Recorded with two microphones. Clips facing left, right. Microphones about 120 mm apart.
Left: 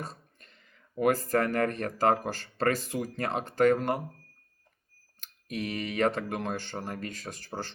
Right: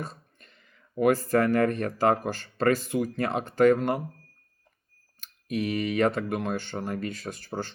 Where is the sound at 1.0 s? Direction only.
40° left (ahead or behind).